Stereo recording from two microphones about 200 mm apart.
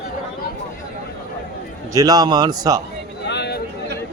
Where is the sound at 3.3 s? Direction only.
55° left (ahead or behind).